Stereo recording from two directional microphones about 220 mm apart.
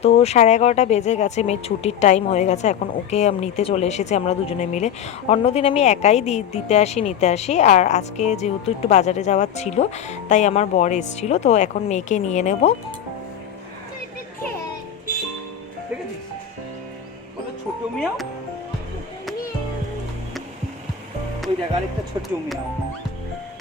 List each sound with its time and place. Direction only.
0.0 s speech: 30° left (ahead or behind)
17.9 s speech: centre (ahead or behind)